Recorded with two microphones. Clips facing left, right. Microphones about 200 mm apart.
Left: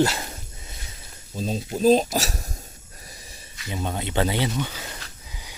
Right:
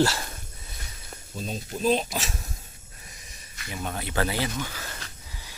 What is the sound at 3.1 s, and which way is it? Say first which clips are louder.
Snake: left 5 dB; 35° left (ahead or behind).